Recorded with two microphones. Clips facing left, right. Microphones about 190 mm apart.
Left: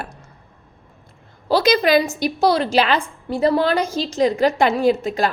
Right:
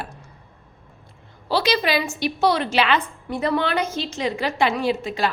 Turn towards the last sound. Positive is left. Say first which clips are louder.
# left 5 dB
turn(degrees=45)  # may be behind; listen again after turning